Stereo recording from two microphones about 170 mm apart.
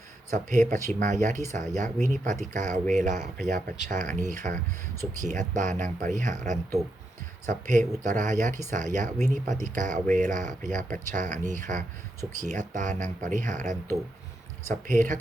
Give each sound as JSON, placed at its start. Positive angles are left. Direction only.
{"t": 0.3, "sound": "speech", "side_deg": -45}